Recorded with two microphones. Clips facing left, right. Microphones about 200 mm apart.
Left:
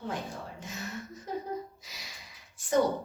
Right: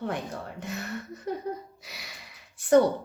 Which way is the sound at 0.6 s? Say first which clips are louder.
Right 6 dB; 65° right (ahead or behind).